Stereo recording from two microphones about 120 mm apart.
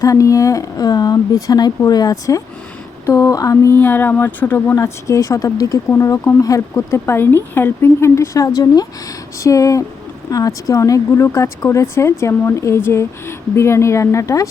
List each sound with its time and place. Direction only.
0.0 s speech: 25° left (ahead or behind)